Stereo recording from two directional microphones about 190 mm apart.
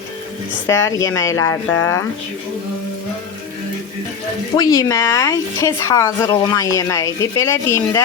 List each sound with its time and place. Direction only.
0.7 s a woman's voice: 15° left (ahead or behind)
4.5 s a woman's voice: 20° left (ahead or behind)